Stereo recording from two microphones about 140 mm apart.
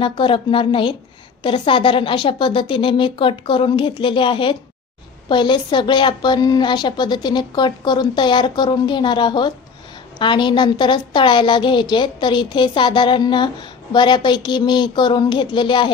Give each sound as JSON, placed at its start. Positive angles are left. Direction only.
{"t": 0.0, "sound": "a woman's voice", "side_deg": 35}